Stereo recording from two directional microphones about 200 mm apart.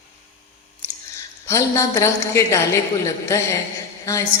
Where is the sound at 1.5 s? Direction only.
15° left (ahead or behind).